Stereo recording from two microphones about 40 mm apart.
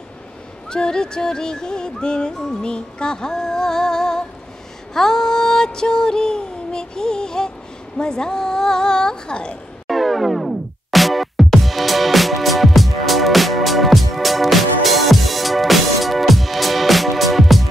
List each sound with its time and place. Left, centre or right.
0.7 s music: centre
9.8 s music: centre